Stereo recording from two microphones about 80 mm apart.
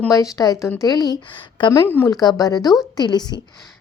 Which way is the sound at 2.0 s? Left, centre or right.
Left.